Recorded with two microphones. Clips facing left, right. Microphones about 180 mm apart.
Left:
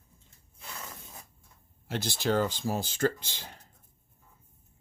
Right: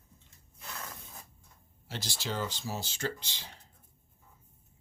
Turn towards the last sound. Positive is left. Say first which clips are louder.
# left 8 dB
turn(degrees=50)  # may be behind; listen again after turning